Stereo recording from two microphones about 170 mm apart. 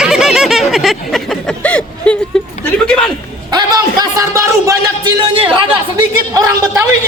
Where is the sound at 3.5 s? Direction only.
25° right (ahead or behind).